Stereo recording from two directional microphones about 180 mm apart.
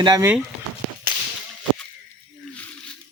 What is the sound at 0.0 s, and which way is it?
Speech, 20° right (ahead or behind).